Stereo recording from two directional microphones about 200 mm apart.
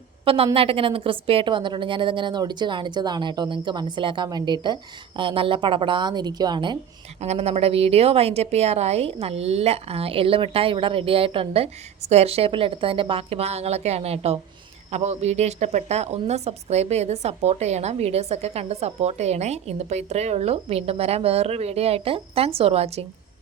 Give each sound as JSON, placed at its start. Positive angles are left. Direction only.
{"t": 0.3, "sound": "a woman's voice", "side_deg": -30}
{"t": 7.2, "sound": "a woman's voice", "side_deg": -30}